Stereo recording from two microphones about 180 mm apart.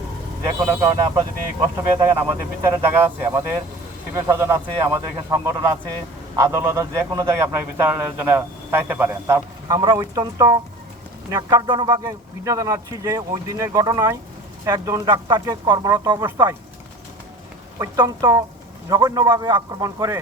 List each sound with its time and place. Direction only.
0.4 s a man's voice: 15° right (ahead or behind)
17.7 s speech: 20° right (ahead or behind)